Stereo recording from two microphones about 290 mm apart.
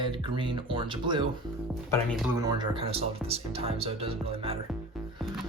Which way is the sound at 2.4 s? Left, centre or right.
Centre.